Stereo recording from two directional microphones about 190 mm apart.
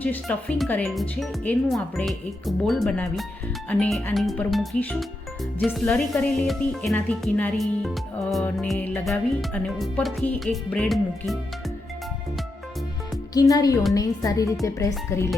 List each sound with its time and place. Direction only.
0.0 s speech: 5° left (ahead or behind)
13.3 s speech: 20° left (ahead or behind)